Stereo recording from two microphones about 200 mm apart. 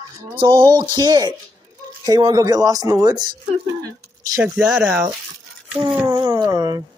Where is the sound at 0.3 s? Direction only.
25° right (ahead or behind).